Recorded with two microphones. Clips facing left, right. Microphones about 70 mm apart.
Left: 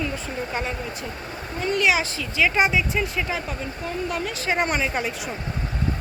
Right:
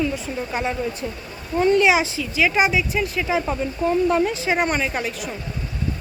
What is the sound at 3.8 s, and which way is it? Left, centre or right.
Speech, right.